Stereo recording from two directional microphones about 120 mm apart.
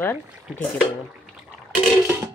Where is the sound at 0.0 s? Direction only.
15° left (ahead or behind).